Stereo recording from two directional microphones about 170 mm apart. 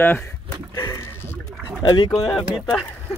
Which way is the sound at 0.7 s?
15° left (ahead or behind).